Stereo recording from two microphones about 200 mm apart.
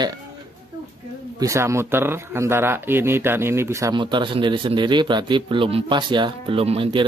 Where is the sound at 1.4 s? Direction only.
15° right (ahead or behind).